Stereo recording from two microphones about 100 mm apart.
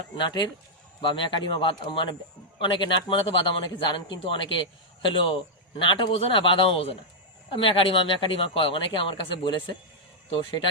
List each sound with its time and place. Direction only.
0.2 s speech: 45° left (ahead or behind)